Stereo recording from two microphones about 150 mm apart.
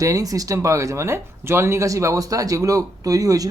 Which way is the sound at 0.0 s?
20° right (ahead or behind).